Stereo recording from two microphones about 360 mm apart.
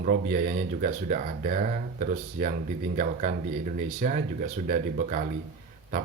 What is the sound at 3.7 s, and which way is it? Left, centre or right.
Speech, right.